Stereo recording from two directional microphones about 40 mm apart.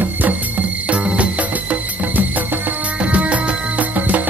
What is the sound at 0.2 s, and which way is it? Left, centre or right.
Music, right.